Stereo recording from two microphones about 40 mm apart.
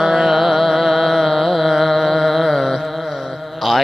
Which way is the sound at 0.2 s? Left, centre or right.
Centre.